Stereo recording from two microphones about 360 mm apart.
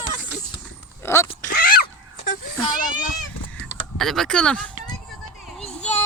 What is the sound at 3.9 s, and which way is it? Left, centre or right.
Speech, centre.